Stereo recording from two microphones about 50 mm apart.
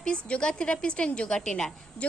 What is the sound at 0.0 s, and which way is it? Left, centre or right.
A woman's voice, centre.